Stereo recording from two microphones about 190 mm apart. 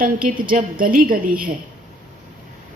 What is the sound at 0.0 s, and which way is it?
A woman's voice, 50° right (ahead or behind).